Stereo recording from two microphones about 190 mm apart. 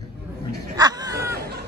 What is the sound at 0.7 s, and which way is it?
Speech, 20° right (ahead or behind).